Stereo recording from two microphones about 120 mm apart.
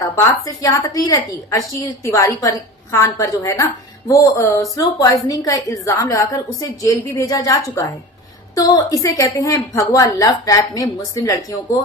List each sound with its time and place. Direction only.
0.0 s a woman's voice: 30° left (ahead or behind)
9.0 s a woman's voice: 25° left (ahead or behind)